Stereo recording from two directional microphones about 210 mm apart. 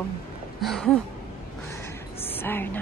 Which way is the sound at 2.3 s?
10° left (ahead or behind).